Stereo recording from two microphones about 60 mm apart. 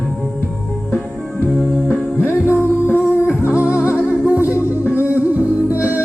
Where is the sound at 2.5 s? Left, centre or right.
Left.